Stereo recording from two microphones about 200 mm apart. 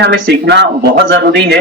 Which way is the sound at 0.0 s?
60° right (ahead or behind).